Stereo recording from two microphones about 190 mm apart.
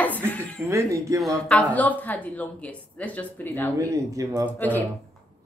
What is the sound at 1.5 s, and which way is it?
Speech, 5° left (ahead or behind).